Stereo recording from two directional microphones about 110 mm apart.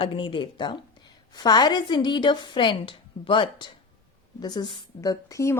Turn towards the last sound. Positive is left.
turn(degrees=30)  # may be behind; listen again after turning